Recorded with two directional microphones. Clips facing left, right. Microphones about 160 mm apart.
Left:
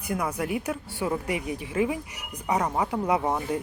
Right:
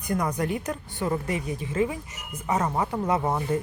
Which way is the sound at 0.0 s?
5° left (ahead or behind).